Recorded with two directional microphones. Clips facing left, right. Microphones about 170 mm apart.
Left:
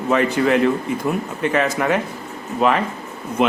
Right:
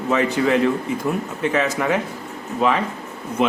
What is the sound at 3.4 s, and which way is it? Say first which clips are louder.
Speech: left 2 dB; 65° left (ahead or behind).